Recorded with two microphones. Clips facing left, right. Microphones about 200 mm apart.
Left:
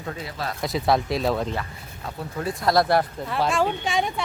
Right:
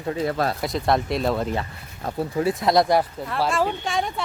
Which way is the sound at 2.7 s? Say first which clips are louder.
Even; 20° right (ahead or behind).